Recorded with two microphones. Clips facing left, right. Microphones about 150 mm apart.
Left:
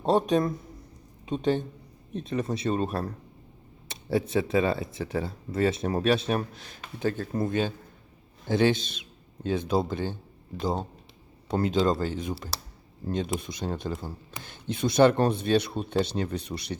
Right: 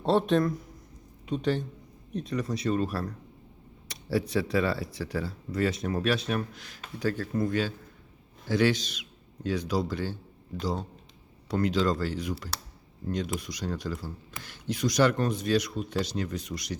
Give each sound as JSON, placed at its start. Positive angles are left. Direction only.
{"t": 0.0, "sound": "a man's voice", "side_deg": 15}